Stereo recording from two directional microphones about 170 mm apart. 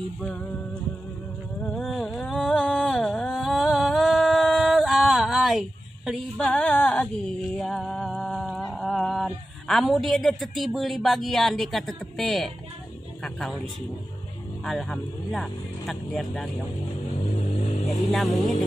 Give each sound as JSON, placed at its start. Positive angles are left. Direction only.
{"t": 0.2, "sound": "speech", "side_deg": 5}
{"t": 1.7, "sound": "a sound", "side_deg": 0}
{"t": 13.2, "sound": "speech", "side_deg": 5}
{"t": 14.6, "sound": "speech", "side_deg": 0}
{"t": 17.3, "sound": "vehicle", "side_deg": 40}
{"t": 18.1, "sound": "speech", "side_deg": 0}